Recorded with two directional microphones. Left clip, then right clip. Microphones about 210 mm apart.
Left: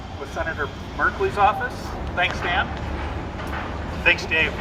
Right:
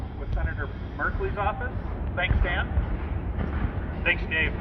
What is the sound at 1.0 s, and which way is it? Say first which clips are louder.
Speech: left 9 dB; centre (ahead or behind).